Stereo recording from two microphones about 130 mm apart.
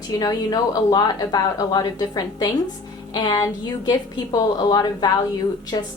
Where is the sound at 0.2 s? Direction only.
30° left (ahead or behind).